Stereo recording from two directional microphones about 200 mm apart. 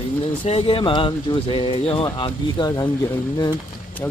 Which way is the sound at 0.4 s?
30° left (ahead or behind).